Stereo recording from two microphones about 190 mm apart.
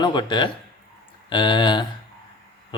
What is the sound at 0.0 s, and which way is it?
A man's voice, 25° left (ahead or behind).